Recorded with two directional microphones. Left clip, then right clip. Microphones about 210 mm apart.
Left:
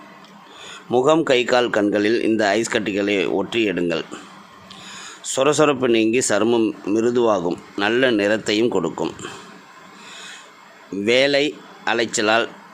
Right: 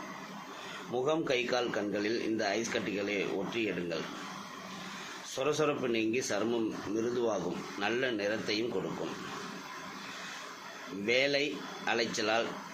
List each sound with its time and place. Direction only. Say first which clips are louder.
0.9 s a man's voice: left 15 dB; 55° left (ahead or behind)
5.3 s a man's voice: left 14 dB; 60° left (ahead or behind)
11.0 s a man's voice: left 13 dB; 55° left (ahead or behind)